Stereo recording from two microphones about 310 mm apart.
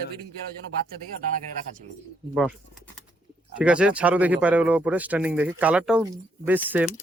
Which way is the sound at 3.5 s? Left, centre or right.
Centre.